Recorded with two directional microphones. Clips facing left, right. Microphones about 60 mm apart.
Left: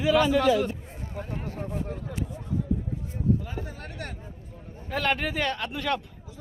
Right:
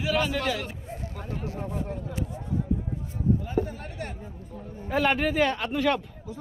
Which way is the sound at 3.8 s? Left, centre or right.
Left.